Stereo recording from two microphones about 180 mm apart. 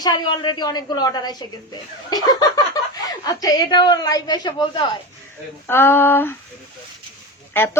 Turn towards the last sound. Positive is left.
turn(degrees=10)  # may be behind; listen again after turning